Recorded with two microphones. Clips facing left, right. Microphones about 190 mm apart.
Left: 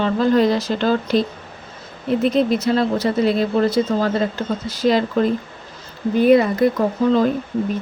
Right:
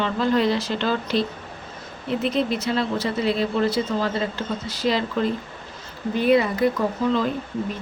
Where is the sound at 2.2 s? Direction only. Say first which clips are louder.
Left 6 dB; 40° left (ahead or behind).